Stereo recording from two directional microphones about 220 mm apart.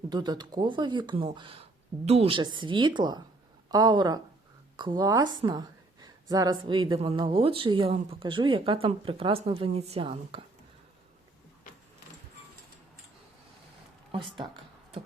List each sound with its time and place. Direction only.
0.1 s a woman's voice: 20° right (ahead or behind)